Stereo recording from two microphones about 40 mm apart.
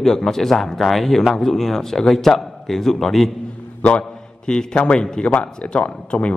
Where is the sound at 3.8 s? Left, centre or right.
Left.